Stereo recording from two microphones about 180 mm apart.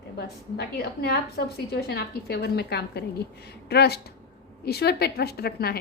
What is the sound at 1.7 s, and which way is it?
A woman's voice, 65° left (ahead or behind).